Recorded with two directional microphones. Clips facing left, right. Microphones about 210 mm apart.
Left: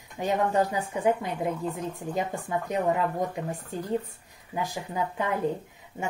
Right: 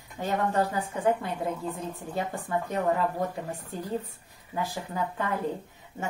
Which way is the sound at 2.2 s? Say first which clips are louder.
Even; 15° left (ahead or behind).